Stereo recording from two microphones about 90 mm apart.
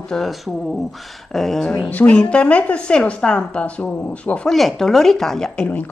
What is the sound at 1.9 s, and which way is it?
A woman's voice, 15° left (ahead or behind).